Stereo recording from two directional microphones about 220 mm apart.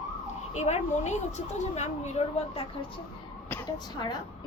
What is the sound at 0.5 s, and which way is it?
A woman's voice, 30° left (ahead or behind).